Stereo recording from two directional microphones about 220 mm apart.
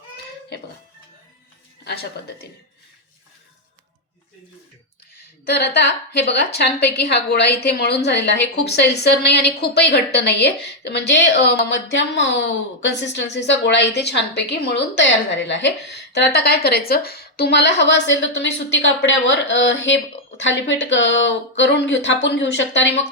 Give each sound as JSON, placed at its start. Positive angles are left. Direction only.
{"t": 5.5, "sound": "a woman's voice", "side_deg": 50}